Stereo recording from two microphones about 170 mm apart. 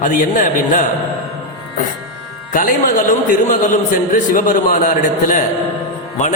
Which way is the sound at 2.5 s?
50° left (ahead or behind).